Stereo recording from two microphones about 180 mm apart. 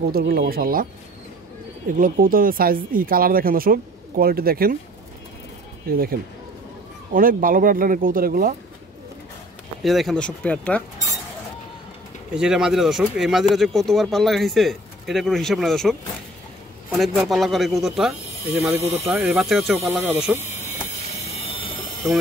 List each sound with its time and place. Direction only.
0.1 s speech: 60° right (ahead or behind)
2.0 s speech: 50° right (ahead or behind)
5.9 s speech: 55° right (ahead or behind)
7.2 s speech: 50° right (ahead or behind)
9.8 s speech: centre (ahead or behind)
12.4 s speech: 5° right (ahead or behind)
18.6 s speech: 15° right (ahead or behind)
20.3 s a sound: 40° left (ahead or behind)